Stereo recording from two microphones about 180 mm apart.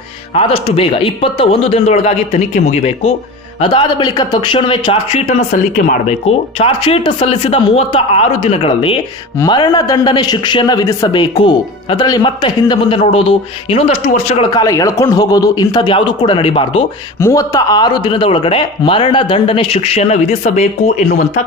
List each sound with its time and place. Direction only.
0.3 s speech: 35° left (ahead or behind)
3.6 s speech: 25° left (ahead or behind)
6.6 s speech: 30° left (ahead or behind)
14.5 s speech: 20° left (ahead or behind)
17.2 s speech: 15° left (ahead or behind); by 21.0 s 40° left (ahead or behind)